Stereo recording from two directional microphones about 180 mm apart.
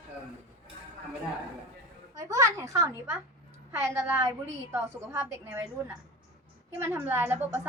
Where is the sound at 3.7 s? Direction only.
15° right (ahead or behind).